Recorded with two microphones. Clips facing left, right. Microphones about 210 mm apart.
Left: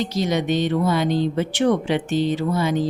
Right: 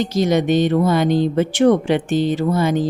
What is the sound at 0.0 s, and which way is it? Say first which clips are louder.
Speech: right 5 dB; 50° right (ahead or behind).